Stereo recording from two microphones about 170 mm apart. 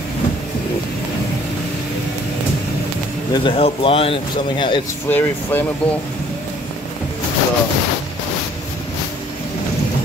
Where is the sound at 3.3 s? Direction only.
30° left (ahead or behind).